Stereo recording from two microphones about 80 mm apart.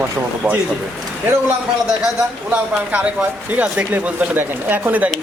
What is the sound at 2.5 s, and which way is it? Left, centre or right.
A man's voice, centre.